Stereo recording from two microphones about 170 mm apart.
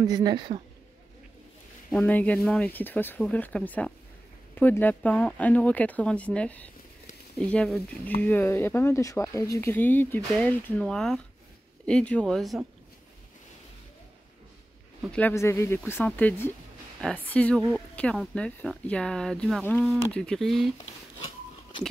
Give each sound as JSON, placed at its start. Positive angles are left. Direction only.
{"t": 0.0, "sound": "speech", "side_deg": -25}
{"t": 1.9, "sound": "speech", "side_deg": 10}
{"t": 15.0, "sound": "speech", "side_deg": 10}